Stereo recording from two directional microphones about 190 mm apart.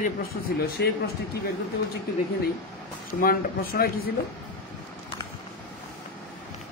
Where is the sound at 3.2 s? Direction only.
50° left (ahead or behind).